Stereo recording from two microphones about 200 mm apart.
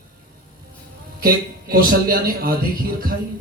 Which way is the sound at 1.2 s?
50° right (ahead or behind).